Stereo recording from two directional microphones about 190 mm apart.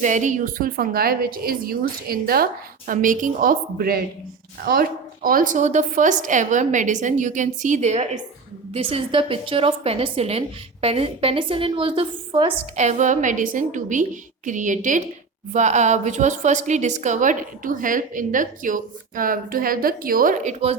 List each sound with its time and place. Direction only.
0.0 s a woman's voice: 40° right (ahead or behind)